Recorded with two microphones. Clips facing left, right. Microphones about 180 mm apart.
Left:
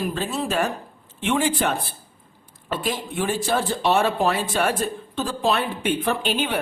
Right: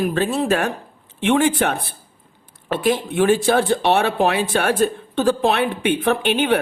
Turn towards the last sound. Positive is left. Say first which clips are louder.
# right 6 dB
turn(degrees=-60)  # may be behind; listen again after turning